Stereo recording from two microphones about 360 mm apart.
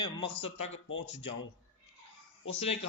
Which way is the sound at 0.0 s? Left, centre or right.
Centre.